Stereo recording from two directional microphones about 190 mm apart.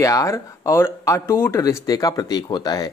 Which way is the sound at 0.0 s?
15° left (ahead or behind).